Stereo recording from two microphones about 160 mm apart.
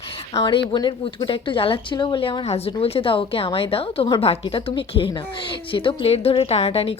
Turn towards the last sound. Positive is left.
turn(degrees=35)  # may be behind; listen again after turning